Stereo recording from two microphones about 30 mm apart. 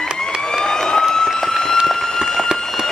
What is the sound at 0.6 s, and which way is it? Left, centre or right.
Vehicle, left.